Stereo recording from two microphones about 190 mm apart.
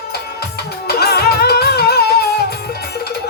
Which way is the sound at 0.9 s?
55° left (ahead or behind).